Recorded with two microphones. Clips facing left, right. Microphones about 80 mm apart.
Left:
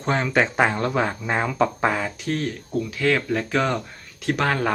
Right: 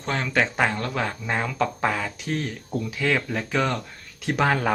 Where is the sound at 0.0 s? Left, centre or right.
Centre.